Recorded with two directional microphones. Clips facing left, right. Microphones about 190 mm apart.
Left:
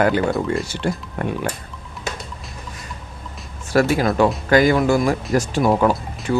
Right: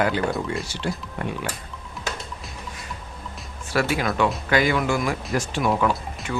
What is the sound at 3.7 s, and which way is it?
Speech, 40° left (ahead or behind).